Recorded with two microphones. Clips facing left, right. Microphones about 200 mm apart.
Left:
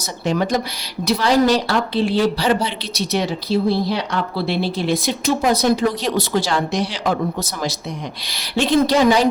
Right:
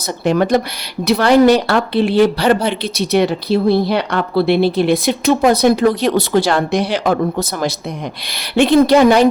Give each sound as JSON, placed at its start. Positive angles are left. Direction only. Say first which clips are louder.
{"t": 0.3, "sound": "a woman's voice", "louder": "right 5 dB", "side_deg": -60}